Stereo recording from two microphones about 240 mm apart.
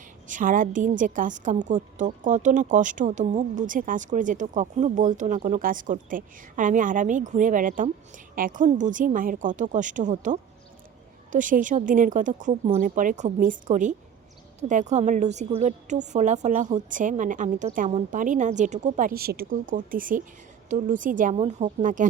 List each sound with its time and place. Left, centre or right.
0.3 s a woman's voice: right